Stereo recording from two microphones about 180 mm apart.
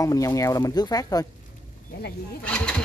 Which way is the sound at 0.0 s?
20° left (ahead or behind).